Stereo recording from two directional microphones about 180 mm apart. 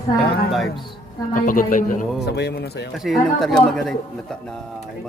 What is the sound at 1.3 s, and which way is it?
Speech, 50° left (ahead or behind).